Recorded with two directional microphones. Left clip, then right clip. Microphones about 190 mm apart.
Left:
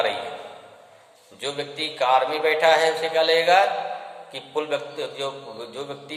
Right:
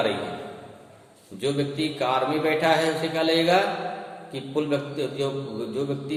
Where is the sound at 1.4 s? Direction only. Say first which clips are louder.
Right 2 dB; 10° left (ahead or behind).